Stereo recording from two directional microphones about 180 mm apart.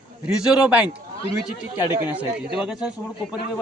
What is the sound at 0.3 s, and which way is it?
A man's voice, 5° right (ahead or behind).